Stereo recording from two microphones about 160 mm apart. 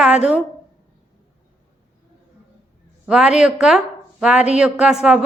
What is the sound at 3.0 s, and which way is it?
A woman's voice, 5° right (ahead or behind).